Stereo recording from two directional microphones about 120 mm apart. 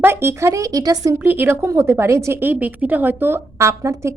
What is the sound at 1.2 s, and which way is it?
Speech, 15° right (ahead or behind).